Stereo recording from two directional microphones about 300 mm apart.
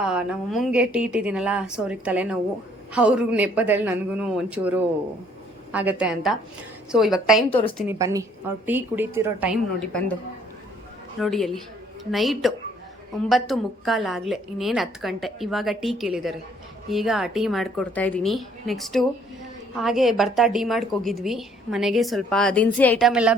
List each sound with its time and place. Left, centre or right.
0.0 s a woman's voice: centre
11.2 s a woman's voice: centre